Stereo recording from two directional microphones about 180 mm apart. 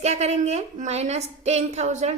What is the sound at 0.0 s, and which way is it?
A woman's voice, 35° right (ahead or behind).